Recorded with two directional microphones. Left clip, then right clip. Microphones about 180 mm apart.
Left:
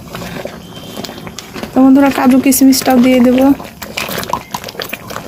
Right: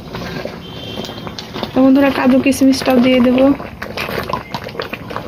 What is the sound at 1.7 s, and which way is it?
Speech, 45° left (ahead or behind).